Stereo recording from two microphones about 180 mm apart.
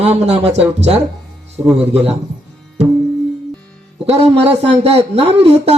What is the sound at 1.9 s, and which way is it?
Speech, 35° right (ahead or behind).